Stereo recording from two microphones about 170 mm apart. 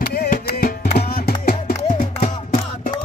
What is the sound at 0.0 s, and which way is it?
Music, 60° left (ahead or behind).